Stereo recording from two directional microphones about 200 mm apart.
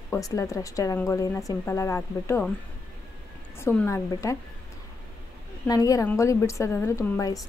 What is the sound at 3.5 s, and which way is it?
Speech, 10° left (ahead or behind).